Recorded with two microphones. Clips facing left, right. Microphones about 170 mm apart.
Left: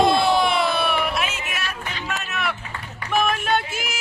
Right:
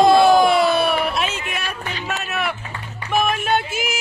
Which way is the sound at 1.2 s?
30° right (ahead or behind).